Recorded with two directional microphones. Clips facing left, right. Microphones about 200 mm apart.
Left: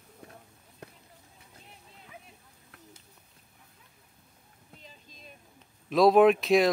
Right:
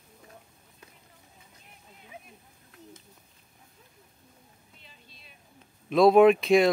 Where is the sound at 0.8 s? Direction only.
65° left (ahead or behind).